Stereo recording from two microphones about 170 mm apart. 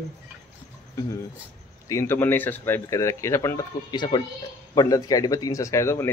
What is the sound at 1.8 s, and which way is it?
A man's voice, 15° left (ahead or behind).